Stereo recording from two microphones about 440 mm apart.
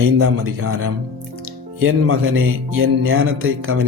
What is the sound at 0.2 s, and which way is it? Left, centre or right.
Music, right.